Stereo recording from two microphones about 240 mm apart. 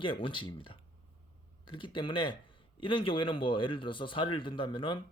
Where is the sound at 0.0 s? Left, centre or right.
Left.